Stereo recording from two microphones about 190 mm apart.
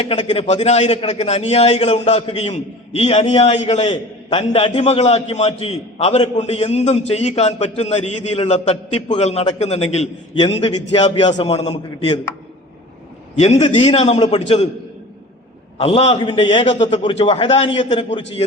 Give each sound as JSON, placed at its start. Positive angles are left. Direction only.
{"t": 0.0, "sound": "a man's voice", "side_deg": 30}
{"t": 13.4, "sound": "a man's voice", "side_deg": 35}
{"t": 15.8, "sound": "a man's voice", "side_deg": 30}
{"t": 16.7, "sound": "a man's voice", "side_deg": 35}
{"t": 17.0, "sound": "a man's voice", "side_deg": 25}